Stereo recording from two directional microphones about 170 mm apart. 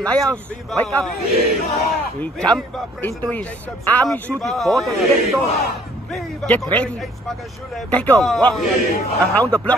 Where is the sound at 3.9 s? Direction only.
10° left (ahead or behind).